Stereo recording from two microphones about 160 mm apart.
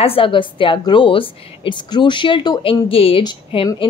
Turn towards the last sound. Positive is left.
turn(degrees=30)  # may be behind; listen again after turning